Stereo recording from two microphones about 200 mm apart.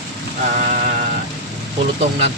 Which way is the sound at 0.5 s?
35° right (ahead or behind).